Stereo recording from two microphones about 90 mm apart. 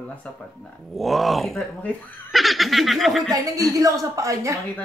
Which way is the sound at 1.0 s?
Centre (ahead or behind).